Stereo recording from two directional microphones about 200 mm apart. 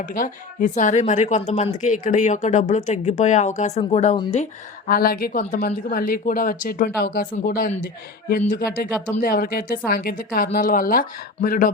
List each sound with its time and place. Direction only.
0.0 s a woman's voice: 40° left (ahead or behind)
4.9 s speech: 45° left (ahead or behind)